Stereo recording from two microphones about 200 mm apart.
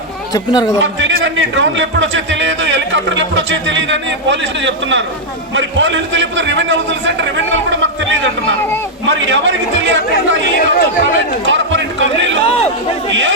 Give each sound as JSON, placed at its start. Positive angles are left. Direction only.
{"t": 0.3, "sound": "speech", "side_deg": 20}
{"t": 0.8, "sound": "a man's voice", "side_deg": -70}
{"t": 7.2, "sound": "chatter", "side_deg": -70}
{"t": 9.0, "sound": "a man's voice", "side_deg": -65}
{"t": 10.2, "sound": "speech", "side_deg": 50}
{"t": 11.4, "sound": "speech", "side_deg": -65}